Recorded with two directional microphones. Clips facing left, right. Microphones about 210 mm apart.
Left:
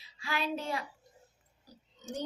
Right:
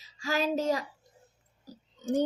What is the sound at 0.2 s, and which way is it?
Speech, 40° right (ahead or behind).